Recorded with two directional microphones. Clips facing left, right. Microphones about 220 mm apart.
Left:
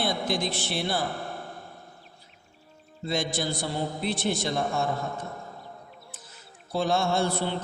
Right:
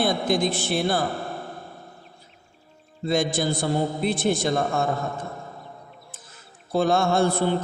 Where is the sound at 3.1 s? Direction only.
50° right (ahead or behind).